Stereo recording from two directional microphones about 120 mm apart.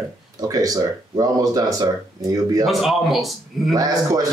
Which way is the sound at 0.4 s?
30° right (ahead or behind).